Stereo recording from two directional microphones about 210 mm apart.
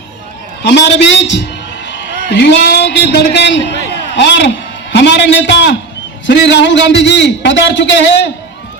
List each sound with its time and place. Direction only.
0.6 s a man's voice: 55° left (ahead or behind)
1.9 s a sound: 60° left (ahead or behind)
2.3 s a man's voice: 55° left (ahead or behind)